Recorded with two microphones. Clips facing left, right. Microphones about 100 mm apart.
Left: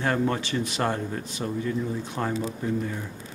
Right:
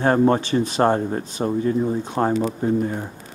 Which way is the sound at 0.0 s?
35° right (ahead or behind).